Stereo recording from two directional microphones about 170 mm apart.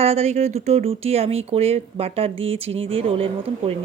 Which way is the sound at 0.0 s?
40° right (ahead or behind).